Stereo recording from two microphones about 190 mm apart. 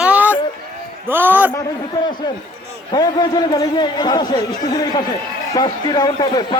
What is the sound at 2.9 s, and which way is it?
A man's voice, 20° left (ahead or behind).